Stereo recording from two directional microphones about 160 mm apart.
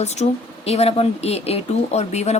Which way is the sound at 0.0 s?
45° left (ahead or behind).